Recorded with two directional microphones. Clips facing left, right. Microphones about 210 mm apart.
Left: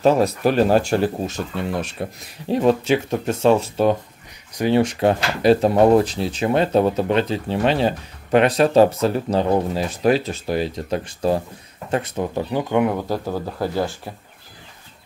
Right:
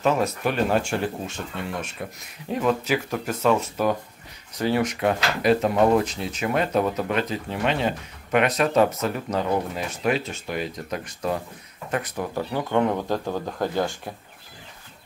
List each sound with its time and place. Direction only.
0.0 s speech: 35° left (ahead or behind); by 14.1 s 5° left (ahead or behind)